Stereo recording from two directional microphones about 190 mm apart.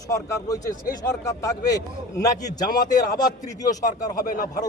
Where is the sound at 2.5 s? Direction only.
20° left (ahead or behind).